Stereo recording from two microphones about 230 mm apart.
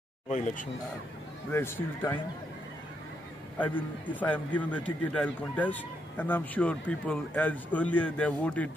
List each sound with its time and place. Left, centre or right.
0.3 s speech: left
1.5 s speech: centre
3.5 s a man's voice: centre